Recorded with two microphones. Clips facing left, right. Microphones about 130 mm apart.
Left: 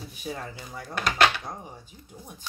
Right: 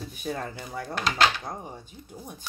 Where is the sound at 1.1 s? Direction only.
60° left (ahead or behind).